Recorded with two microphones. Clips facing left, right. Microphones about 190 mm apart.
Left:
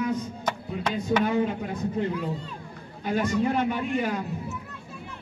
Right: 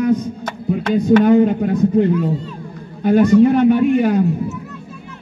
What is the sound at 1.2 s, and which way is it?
Speech, 55° right (ahead or behind).